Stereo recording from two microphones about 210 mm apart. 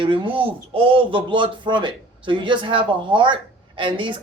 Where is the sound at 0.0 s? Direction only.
20° right (ahead or behind).